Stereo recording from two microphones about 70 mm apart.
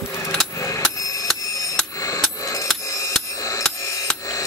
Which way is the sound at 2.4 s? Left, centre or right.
Left.